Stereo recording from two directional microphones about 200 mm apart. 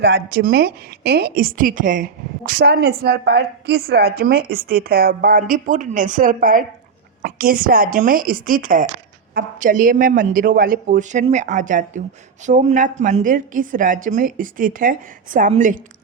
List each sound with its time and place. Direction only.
0.0 s a woman's voice: 50° right (ahead or behind)